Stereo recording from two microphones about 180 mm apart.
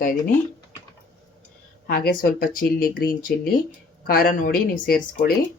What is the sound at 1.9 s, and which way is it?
Speech, 55° left (ahead or behind).